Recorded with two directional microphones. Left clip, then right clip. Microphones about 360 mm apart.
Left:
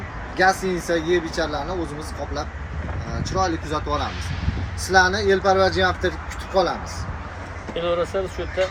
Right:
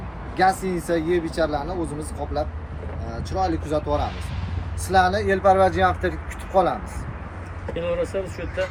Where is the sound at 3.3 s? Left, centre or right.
Centre.